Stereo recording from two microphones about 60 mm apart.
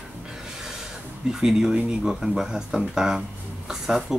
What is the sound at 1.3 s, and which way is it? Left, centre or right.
Speech, centre.